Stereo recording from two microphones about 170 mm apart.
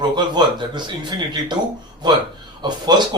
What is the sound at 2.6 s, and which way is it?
Speech, 25° right (ahead or behind).